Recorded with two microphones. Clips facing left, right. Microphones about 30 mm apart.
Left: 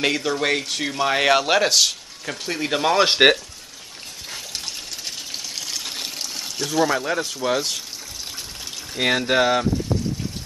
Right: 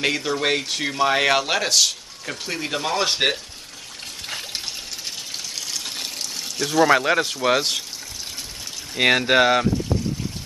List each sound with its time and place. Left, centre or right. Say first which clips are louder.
0.0 s speech: left 1 dB; centre
2.7 s speech: left 6 dB; centre
3.1 s speech: left 7 dB; left
5.7 s water: left 1 dB; centre
6.6 s speech: right 2 dB; centre
6.9 s speech: right 5 dB; right
8.9 s speech: right 3 dB; right